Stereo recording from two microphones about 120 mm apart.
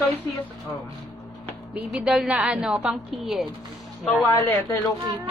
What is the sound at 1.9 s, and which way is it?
A woman's voice, 5° right (ahead or behind).